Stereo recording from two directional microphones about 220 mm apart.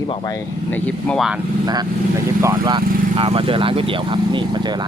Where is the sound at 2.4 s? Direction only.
20° right (ahead or behind).